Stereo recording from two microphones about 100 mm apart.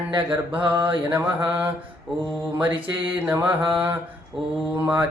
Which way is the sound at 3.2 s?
10° right (ahead or behind).